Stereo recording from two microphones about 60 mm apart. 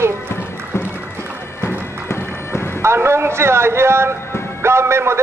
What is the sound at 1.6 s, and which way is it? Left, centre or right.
Bagpipes, left.